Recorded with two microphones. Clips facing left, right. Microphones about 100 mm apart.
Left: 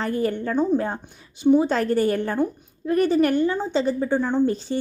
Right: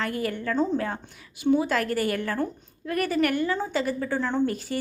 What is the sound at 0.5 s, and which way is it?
Speech, 15° left (ahead or behind).